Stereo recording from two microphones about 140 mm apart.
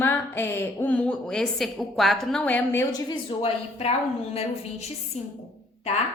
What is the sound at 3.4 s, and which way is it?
A woman's voice, 45° left (ahead or behind).